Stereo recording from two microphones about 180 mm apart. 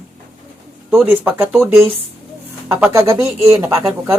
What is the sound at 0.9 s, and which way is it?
Speech, 10° right (ahead or behind).